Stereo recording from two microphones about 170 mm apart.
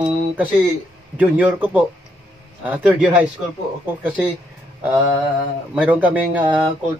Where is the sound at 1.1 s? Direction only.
10° right (ahead or behind).